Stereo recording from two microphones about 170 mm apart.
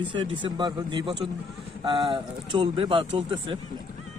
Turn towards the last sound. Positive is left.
turn(degrees=-30)  # may be behind; listen again after turning